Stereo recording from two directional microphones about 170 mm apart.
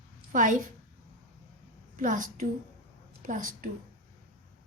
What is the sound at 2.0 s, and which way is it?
A woman's voice, 50° right (ahead or behind).